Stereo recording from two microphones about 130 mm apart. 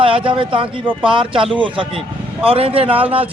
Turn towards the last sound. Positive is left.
turn(degrees=-10)  # may be behind; listen again after turning